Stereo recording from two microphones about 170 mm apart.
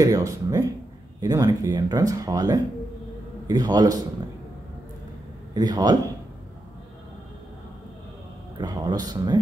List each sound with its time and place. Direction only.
0.0 s speech: 20° right (ahead or behind)
5.5 s a man's voice: 25° right (ahead or behind)
8.5 s speech: 25° right (ahead or behind)